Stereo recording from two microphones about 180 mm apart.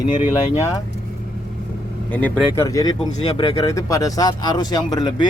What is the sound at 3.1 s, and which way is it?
Speech, 35° left (ahead or behind).